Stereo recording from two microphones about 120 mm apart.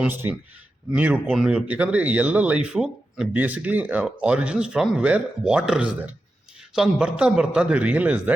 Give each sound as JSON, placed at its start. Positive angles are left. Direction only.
{"t": 0.0, "sound": "speech", "side_deg": -15}